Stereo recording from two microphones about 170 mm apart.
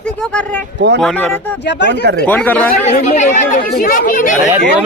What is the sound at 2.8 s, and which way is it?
Speech, 45° left (ahead or behind).